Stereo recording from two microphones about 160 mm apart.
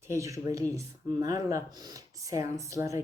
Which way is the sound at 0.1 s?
20° right (ahead or behind).